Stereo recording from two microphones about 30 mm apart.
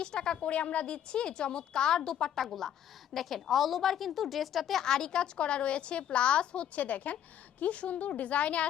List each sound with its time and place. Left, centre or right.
0.0 s a woman's voice: left
0.9 s a woman's voice: left
2.3 s a woman's voice: centre
4.8 s a woman's voice: left
6.7 s a woman's voice: left